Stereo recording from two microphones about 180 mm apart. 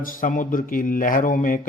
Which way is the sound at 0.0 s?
45° left (ahead or behind).